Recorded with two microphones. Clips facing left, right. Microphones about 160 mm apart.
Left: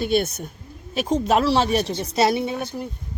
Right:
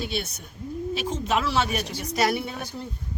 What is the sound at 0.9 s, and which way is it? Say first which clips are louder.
A woman's voice: left 8 dB; 40° left (ahead or behind).